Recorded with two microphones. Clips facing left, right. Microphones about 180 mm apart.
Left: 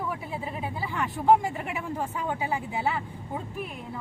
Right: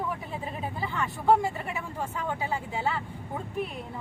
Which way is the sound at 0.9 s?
15° left (ahead or behind).